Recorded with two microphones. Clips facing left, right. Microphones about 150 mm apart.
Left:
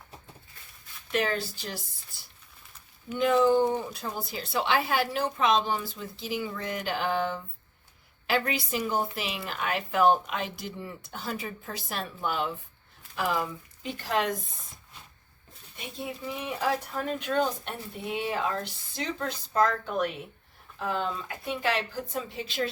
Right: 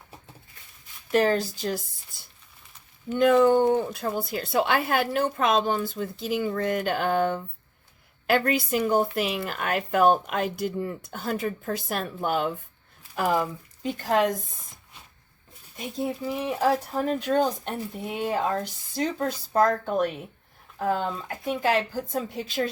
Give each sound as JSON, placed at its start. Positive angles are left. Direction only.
{"t": 1.1, "sound": "speech", "side_deg": -40}
{"t": 3.2, "sound": "speech", "side_deg": -60}
{"t": 15.8, "sound": "speech", "side_deg": -35}